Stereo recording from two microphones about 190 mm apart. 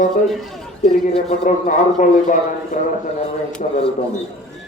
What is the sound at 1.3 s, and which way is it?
A man's voice, 40° left (ahead or behind).